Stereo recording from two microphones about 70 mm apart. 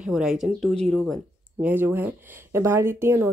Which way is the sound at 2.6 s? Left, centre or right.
Right.